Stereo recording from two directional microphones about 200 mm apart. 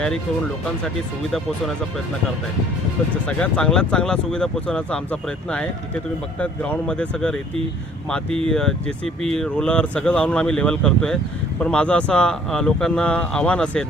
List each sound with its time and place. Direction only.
3.2 s speech: 5° left (ahead or behind)
6.4 s speech: 5° left (ahead or behind)
8.4 s speech: 5° left (ahead or behind)